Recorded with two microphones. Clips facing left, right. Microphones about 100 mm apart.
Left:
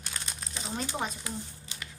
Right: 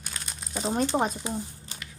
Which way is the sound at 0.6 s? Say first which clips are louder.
Right 9 dB; 45° right (ahead or behind).